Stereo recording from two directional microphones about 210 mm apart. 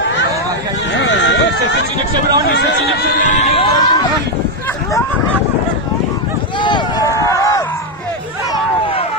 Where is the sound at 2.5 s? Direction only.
55° left (ahead or behind).